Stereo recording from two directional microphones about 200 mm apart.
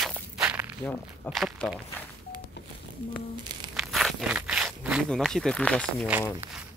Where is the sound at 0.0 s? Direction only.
5° right (ahead or behind).